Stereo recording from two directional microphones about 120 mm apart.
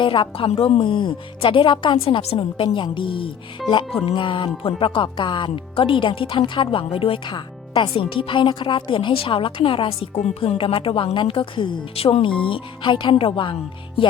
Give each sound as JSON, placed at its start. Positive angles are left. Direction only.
{"t": 0.0, "sound": "speech", "side_deg": 45}